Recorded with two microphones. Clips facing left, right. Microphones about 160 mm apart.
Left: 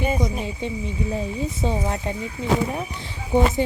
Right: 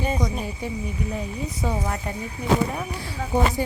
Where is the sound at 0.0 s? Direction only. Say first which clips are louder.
Left 2 dB; 10° left (ahead or behind).